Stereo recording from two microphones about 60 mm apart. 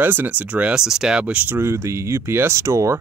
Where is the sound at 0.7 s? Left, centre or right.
Centre.